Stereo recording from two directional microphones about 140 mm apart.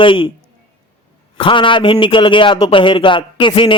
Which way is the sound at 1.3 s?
35° left (ahead or behind).